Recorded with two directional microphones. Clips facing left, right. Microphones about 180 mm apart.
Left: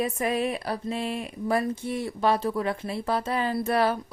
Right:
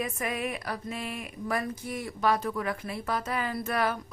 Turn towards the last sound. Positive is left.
turn(degrees=30)  # may be behind; listen again after turning